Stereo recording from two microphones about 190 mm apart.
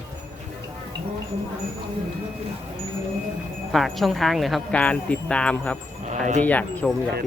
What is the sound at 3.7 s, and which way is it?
Speech, centre (ahead or behind).